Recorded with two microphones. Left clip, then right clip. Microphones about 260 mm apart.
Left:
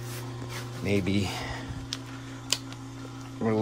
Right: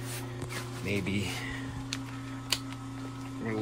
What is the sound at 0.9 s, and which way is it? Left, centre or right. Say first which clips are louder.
Speech: left 5 dB; centre.